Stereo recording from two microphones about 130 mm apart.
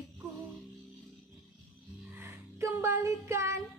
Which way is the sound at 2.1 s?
20° right (ahead or behind).